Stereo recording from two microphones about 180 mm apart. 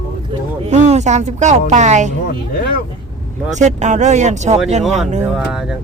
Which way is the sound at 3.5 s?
40° right (ahead or behind).